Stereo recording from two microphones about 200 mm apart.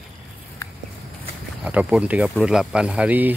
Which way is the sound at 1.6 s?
5° right (ahead or behind).